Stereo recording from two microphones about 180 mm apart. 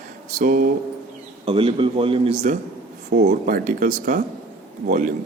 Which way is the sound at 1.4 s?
30° right (ahead or behind).